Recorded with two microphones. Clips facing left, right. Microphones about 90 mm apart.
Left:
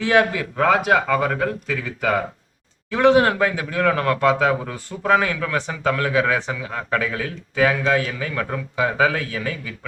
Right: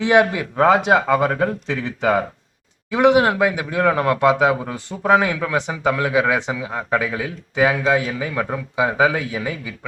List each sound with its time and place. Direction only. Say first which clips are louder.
0.0 s a man's voice: right 2 dB; 15° right (ahead or behind)